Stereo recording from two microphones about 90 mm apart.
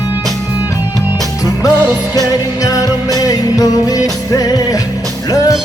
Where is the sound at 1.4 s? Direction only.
45° left (ahead or behind).